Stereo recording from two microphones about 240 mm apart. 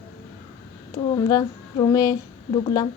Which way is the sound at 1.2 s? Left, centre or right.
Centre.